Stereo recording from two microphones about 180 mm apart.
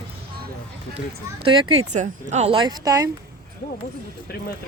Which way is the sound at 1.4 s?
30° right (ahead or behind).